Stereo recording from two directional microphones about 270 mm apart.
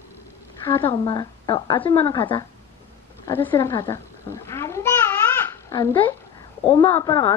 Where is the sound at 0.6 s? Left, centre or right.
Centre.